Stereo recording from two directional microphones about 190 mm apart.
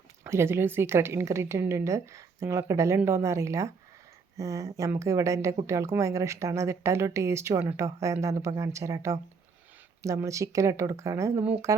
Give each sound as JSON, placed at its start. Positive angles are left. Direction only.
{"t": 0.3, "sound": "speech", "side_deg": -15}